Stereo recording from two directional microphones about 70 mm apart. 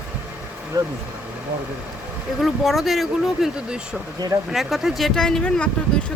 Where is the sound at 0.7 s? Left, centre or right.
Right.